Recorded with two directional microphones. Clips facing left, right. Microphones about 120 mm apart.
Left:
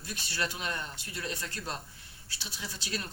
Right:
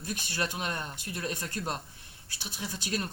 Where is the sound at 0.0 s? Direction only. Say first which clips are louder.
Right 2 dB; 45° right (ahead or behind).